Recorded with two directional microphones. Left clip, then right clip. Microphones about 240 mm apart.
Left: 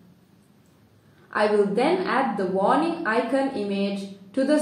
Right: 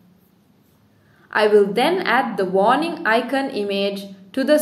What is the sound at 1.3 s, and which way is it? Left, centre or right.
A woman's voice, right.